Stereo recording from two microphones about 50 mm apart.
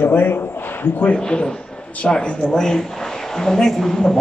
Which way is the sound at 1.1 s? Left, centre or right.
Centre.